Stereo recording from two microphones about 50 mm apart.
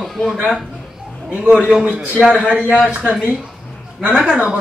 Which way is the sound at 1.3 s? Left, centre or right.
Centre.